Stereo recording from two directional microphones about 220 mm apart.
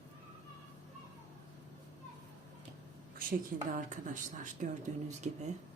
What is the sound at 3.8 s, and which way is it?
Speech, 35° right (ahead or behind).